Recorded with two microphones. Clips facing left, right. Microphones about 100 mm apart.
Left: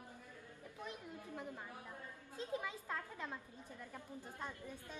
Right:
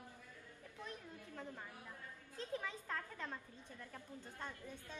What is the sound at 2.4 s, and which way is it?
A woman's voice, 10° left (ahead or behind).